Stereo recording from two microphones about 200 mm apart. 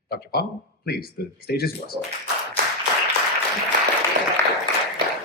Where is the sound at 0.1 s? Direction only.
50° left (ahead or behind).